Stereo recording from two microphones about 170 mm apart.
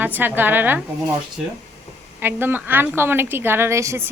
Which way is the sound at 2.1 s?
10° right (ahead or behind).